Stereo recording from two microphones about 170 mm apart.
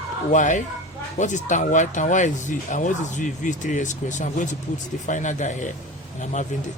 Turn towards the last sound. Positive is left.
turn(degrees=45)  # may be behind; listen again after turning